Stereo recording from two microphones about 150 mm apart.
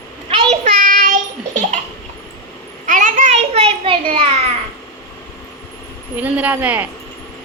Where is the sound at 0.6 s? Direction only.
55° right (ahead or behind).